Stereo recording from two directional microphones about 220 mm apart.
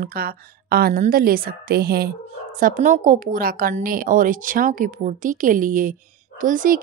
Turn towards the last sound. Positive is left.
turn(degrees=-40)  # may be behind; listen again after turning